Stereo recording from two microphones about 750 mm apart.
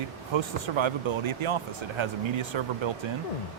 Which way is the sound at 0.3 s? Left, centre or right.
Right.